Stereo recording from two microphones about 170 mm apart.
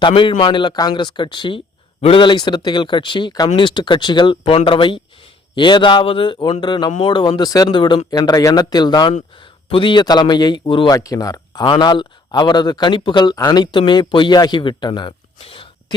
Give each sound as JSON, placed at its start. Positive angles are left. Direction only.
{"t": 0.0, "sound": "speech", "side_deg": 30}